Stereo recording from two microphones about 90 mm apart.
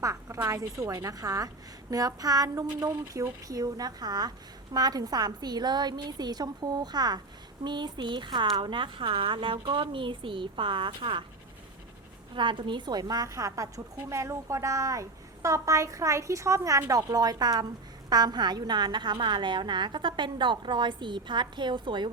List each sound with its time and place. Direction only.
0.0 s a woman's voice: 35° right (ahead or behind); by 11.2 s 70° right (ahead or behind)
12.3 s a woman's voice: 65° right (ahead or behind)